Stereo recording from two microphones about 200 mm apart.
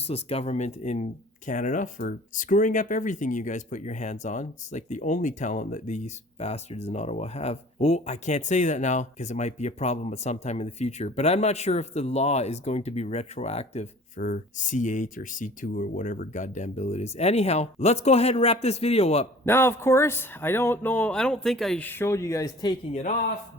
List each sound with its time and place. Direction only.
0.1 s speech: 30° left (ahead or behind)
19.5 s speech: 10° left (ahead or behind)
22.9 s speech: 35° left (ahead or behind)